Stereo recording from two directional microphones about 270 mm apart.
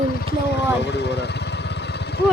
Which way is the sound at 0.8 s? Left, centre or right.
Left.